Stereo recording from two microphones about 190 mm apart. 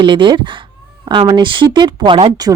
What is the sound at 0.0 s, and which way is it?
Speech, 25° right (ahead or behind).